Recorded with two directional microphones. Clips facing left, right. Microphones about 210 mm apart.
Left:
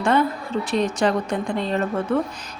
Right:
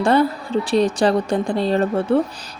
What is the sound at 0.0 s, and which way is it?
A woman's voice, 35° right (ahead or behind).